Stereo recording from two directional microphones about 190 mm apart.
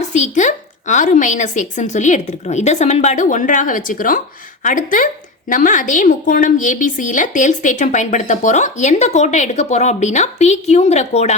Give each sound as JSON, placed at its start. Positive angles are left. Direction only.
{"t": 0.0, "sound": "a woman's voice", "side_deg": 40}